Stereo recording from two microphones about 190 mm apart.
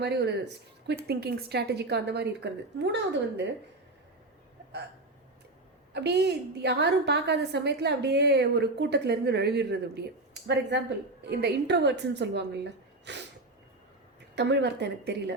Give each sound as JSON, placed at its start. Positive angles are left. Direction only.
{"t": 0.0, "sound": "a woman's voice", "side_deg": -60}
{"t": 5.9, "sound": "a woman's voice", "side_deg": -60}
{"t": 14.3, "sound": "a woman's voice", "side_deg": -65}